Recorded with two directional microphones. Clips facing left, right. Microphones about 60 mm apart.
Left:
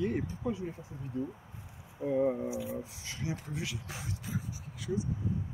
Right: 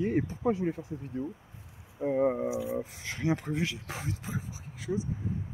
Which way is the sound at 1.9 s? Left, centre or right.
Right.